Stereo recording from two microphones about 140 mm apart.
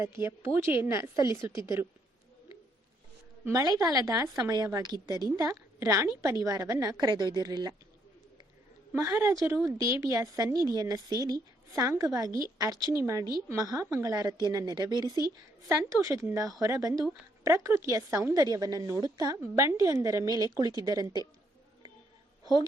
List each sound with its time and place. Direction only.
0.0 s a woman's voice: 20° right (ahead or behind)
3.4 s a woman's voice: 25° right (ahead or behind)
8.9 s a woman's voice: 20° right (ahead or behind)